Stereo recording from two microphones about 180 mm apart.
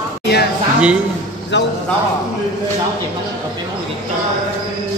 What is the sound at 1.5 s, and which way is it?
Speech, 80° left.